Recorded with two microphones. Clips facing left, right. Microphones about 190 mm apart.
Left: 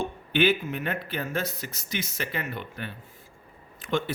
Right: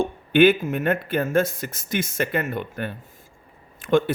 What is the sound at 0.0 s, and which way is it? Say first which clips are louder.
Speech: right 8 dB; 50° right (ahead or behind).